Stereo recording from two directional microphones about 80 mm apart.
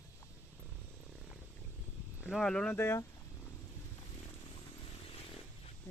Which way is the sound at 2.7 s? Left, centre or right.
Left.